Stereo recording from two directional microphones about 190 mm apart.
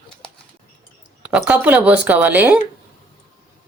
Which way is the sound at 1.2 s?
10° right (ahead or behind).